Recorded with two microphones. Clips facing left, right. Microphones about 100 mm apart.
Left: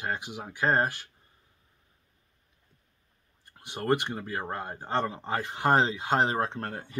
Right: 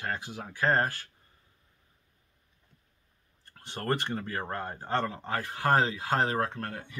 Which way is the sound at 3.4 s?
10° left (ahead or behind).